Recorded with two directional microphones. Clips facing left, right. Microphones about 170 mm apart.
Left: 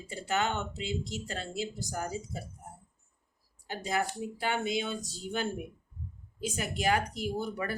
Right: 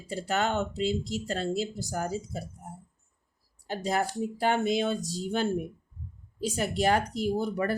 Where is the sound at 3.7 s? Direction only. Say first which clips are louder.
Right 3 dB; 40° right (ahead or behind).